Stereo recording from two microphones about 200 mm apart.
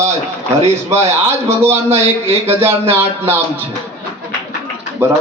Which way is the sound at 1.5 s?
15° right (ahead or behind).